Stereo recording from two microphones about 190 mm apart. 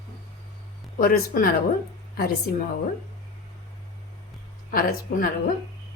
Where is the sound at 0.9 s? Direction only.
50° left (ahead or behind).